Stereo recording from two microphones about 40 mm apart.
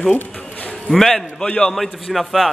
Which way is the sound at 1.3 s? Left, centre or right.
Left.